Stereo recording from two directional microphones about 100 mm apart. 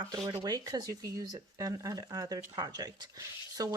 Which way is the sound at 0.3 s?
40° right (ahead or behind).